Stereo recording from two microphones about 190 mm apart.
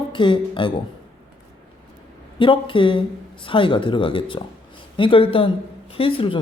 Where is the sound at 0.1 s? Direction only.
25° left (ahead or behind).